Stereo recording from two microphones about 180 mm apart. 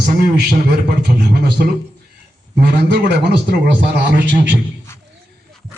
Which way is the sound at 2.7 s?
65° right (ahead or behind).